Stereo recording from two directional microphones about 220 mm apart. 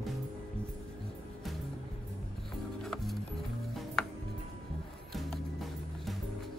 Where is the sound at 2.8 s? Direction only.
Centre (ahead or behind).